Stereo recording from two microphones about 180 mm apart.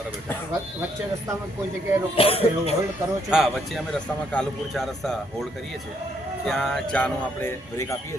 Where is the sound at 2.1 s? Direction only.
30° left (ahead or behind).